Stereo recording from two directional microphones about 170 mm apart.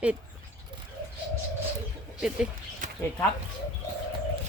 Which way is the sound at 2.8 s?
45° right (ahead or behind).